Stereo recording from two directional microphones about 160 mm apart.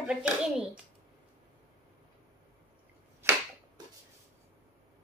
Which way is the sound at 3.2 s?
15° right (ahead or behind).